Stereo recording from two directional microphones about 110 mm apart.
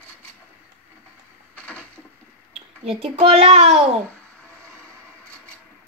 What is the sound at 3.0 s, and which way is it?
Speech, 65° right (ahead or behind).